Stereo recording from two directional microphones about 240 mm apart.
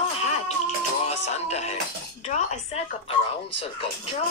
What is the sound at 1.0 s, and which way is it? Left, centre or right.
Speech, left.